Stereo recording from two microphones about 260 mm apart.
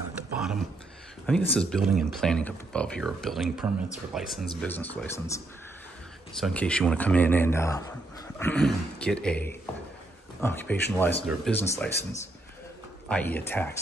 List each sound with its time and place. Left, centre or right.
0.4 s a sound: centre
1.2 s speech: centre
13.1 s speech: centre